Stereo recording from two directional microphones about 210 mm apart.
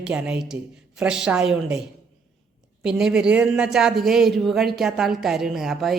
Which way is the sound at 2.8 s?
5° right (ahead or behind).